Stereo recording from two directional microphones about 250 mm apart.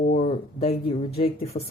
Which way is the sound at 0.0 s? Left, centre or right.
Left.